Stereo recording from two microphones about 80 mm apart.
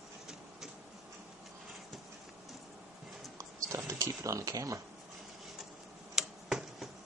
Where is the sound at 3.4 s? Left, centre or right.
Right.